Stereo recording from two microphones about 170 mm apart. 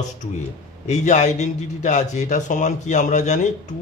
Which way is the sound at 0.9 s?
45° left (ahead or behind).